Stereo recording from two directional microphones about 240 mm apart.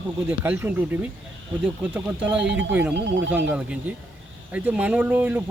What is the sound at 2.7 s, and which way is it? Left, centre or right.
Speech, centre.